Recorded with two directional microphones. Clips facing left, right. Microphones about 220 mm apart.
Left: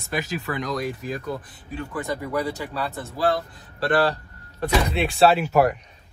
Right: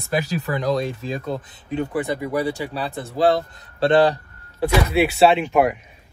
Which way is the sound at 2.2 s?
15° right (ahead or behind).